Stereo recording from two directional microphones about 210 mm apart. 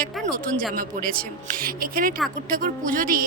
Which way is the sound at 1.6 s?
45° right (ahead or behind).